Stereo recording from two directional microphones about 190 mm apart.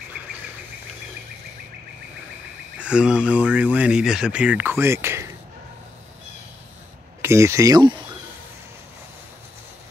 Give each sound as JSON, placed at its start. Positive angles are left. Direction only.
{"t": 2.8, "sound": "speech", "side_deg": -5}
{"t": 7.2, "sound": "speech", "side_deg": -15}